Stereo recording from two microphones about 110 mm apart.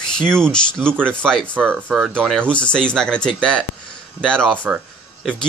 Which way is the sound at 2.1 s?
5° left (ahead or behind).